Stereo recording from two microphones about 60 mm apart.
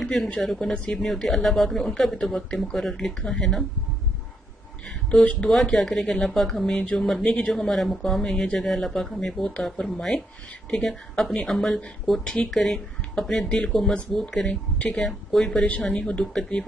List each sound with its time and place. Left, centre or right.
0.0 s speech: centre
5.2 s speech: left
5.5 s speech: centre
9.4 s speech: centre
9.7 s speech: centre
15.9 s speech: centre